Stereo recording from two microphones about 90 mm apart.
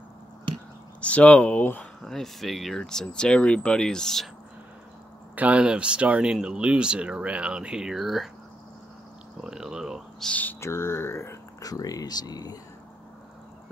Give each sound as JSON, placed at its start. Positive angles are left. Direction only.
{"t": 1.0, "sound": "speech", "side_deg": 15}
{"t": 2.0, "sound": "speech", "side_deg": 5}
{"t": 5.3, "sound": "speech", "side_deg": -15}
{"t": 9.4, "sound": "a sound", "side_deg": -10}
{"t": 10.2, "sound": "speech", "side_deg": 15}
{"t": 10.6, "sound": "speech", "side_deg": 30}
{"t": 11.6, "sound": "speech", "side_deg": 45}